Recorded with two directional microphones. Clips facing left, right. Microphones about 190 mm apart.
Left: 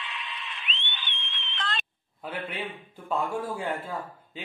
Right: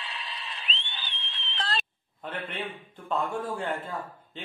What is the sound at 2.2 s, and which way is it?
A man's voice, 10° left (ahead or behind).